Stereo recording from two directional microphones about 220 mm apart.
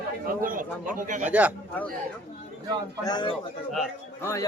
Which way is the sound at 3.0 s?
20° left (ahead or behind).